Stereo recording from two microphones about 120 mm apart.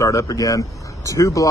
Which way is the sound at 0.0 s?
25° left (ahead or behind).